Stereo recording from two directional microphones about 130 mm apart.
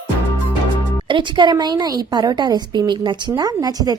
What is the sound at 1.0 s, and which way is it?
Speech, 40° right (ahead or behind).